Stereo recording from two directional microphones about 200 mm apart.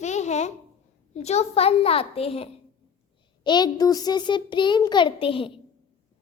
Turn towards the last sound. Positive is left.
turn(degrees=25)  # may be behind; listen again after turning